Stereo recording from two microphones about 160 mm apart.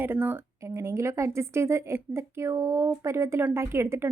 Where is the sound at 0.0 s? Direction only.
10° right (ahead or behind).